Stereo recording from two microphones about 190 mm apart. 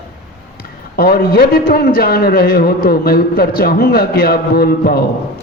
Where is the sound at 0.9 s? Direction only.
55° left (ahead or behind).